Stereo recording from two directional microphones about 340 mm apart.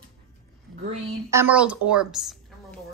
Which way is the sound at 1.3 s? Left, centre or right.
Centre.